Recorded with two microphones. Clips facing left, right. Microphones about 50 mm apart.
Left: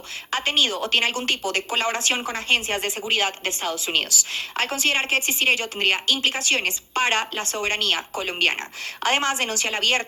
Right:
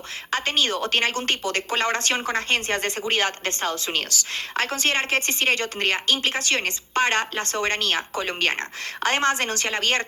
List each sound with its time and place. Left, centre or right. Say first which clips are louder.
0.3 s a woman's voice: left 1 dB; right